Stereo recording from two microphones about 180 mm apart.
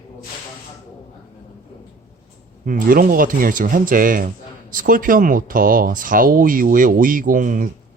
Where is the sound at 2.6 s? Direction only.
50° right (ahead or behind).